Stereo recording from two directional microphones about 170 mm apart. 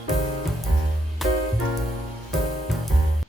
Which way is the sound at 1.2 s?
Centre (ahead or behind).